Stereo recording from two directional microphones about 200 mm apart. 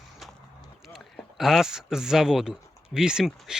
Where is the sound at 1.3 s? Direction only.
Centre (ahead or behind).